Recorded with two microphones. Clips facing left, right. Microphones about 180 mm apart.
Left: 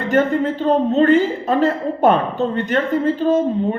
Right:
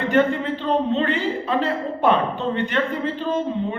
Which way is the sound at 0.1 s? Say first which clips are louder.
Left 4 dB; 45° left (ahead or behind).